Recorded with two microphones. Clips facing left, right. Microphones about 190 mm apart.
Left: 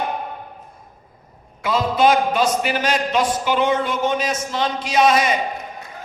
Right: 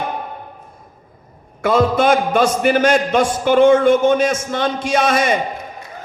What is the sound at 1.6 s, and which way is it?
A man's voice, 50° right (ahead or behind).